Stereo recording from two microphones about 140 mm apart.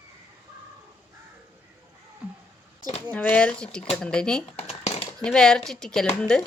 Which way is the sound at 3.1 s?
10° left (ahead or behind).